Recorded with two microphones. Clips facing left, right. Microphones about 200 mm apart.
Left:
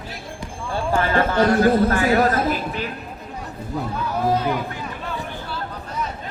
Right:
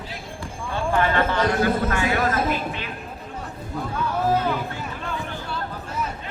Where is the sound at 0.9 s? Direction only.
40° left (ahead or behind).